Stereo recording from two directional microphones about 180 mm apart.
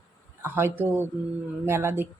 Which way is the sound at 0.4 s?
10° right (ahead or behind).